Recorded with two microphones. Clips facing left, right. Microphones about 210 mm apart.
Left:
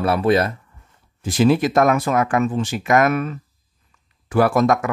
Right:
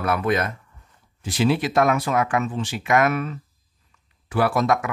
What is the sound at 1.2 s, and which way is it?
Speech, 45° left (ahead or behind).